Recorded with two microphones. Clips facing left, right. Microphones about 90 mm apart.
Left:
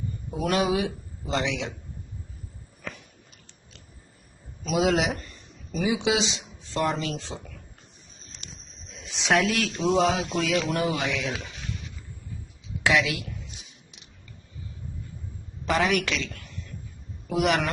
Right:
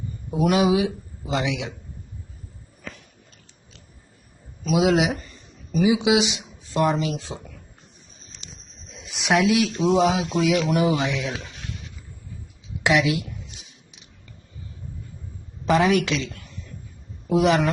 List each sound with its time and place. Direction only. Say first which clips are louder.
0.3 s speech: right 5 dB; 5° right (ahead or behind)
2.8 s chewing: left 1 dB; centre (ahead or behind)
4.6 s speech: right 4 dB; centre (ahead or behind)
9.0 s speech: right 3 dB; 5° right (ahead or behind); by 11.4 s 20° right (ahead or behind)
12.8 s speech: right 3 dB; 25° right (ahead or behind)
15.6 s speech: right 5 dB; 20° right (ahead or behind)